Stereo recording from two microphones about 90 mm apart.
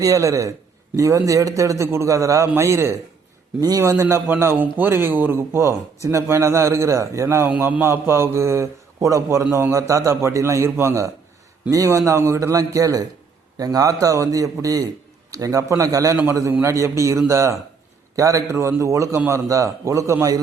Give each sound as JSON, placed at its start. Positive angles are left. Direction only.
{"t": 0.0, "sound": "a man's voice", "side_deg": -35}